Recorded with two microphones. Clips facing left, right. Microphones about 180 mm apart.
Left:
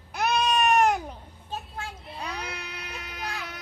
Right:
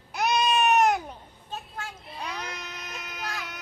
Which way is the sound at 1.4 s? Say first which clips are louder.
Left 2 dB; 35° left (ahead or behind).